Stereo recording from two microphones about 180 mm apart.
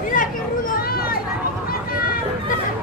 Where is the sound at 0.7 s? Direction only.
55° left (ahead or behind).